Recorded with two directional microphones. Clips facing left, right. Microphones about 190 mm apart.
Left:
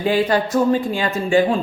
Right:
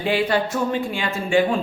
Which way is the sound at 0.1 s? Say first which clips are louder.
Left 3 dB; 40° left (ahead or behind).